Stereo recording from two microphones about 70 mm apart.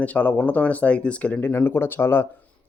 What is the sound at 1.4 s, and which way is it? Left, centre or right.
Speech, left.